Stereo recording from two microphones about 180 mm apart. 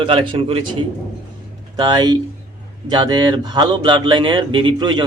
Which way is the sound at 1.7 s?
25° right (ahead or behind).